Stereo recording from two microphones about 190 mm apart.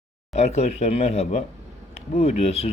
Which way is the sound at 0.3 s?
35° left (ahead or behind).